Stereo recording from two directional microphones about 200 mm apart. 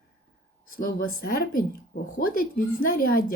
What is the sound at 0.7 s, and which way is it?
A woman's voice, 50° left (ahead or behind).